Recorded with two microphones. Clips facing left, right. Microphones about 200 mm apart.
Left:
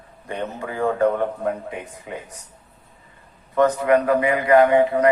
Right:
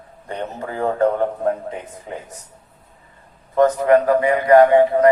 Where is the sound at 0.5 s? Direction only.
35° right (ahead or behind).